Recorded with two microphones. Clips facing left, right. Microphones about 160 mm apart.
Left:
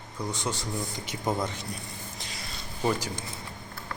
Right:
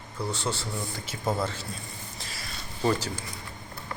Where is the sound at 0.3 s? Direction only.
15° left (ahead or behind).